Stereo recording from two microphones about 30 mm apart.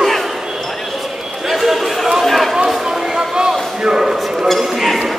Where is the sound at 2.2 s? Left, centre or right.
Centre.